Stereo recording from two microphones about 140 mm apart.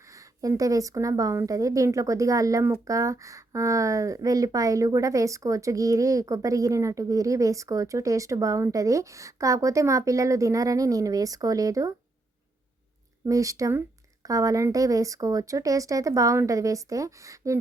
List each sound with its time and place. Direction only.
0.0 s a woman's voice: 25° right (ahead or behind)
13.2 s a woman's voice: 25° right (ahead or behind)